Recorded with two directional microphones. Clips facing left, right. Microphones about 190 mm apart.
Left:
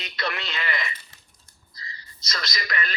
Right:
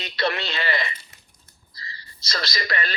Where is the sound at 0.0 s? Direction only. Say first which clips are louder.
Right 6 dB; 30° right (ahead or behind).